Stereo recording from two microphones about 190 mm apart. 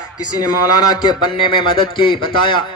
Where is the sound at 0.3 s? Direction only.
20° left (ahead or behind).